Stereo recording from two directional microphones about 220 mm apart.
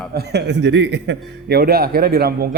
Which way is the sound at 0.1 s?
50° right (ahead or behind).